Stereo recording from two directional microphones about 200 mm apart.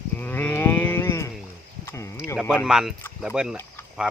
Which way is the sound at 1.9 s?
15° left (ahead or behind).